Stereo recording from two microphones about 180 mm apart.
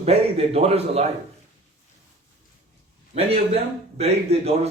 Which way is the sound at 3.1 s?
35° right (ahead or behind).